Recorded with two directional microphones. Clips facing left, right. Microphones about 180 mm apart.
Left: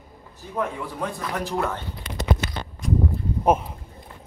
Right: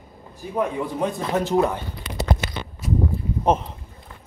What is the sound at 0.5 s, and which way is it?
Speech, 20° right (ahead or behind).